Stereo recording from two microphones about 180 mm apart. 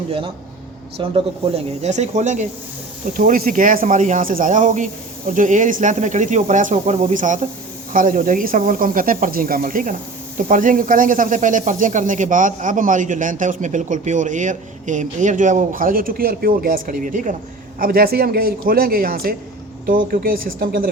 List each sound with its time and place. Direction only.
0.9 s speech: 35° right (ahead or behind)
3.1 s a man's voice: 50° right (ahead or behind)